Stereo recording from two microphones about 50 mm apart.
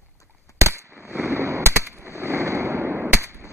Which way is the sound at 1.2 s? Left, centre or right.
Right.